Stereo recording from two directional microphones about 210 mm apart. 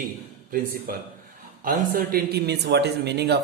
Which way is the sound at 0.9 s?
45° right (ahead or behind).